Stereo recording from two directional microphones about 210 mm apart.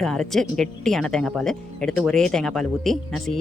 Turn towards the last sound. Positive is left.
turn(degrees=0)  # may be behind; listen again after turning